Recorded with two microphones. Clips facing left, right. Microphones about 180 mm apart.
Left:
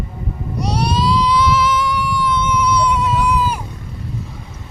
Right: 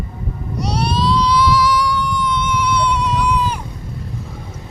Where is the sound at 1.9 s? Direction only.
10° left (ahead or behind).